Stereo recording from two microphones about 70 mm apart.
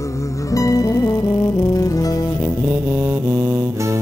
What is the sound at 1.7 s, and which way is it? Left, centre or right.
Music, left.